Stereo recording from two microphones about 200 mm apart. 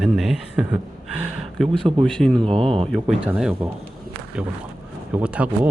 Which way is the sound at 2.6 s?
30° right (ahead or behind).